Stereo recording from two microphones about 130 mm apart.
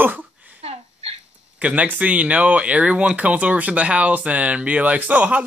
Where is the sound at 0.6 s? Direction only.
50° right (ahead or behind).